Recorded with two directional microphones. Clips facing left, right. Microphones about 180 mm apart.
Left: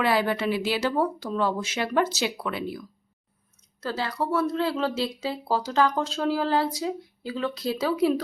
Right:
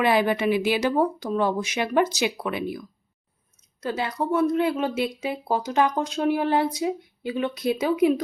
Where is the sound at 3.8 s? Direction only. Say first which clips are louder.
Right 2 dB; 20° right (ahead or behind).